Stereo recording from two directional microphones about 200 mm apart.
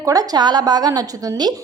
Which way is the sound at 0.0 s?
15° right (ahead or behind).